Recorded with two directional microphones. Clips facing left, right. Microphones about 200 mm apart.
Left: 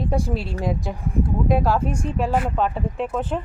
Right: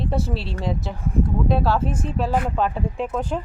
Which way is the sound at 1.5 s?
15° left (ahead or behind).